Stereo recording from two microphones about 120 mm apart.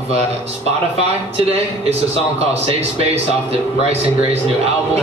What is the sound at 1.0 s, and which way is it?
A man's voice, 60° right (ahead or behind).